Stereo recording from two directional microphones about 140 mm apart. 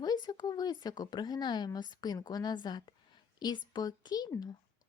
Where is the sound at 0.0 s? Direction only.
30° left (ahead or behind).